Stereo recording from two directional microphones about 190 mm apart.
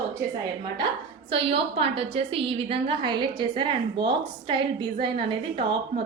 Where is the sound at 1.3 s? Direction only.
30° right (ahead or behind).